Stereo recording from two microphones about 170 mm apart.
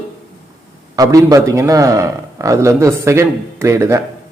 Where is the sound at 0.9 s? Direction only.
20° right (ahead or behind).